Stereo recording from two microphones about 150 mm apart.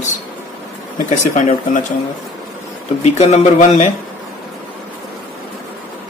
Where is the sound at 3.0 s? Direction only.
50° left (ahead or behind).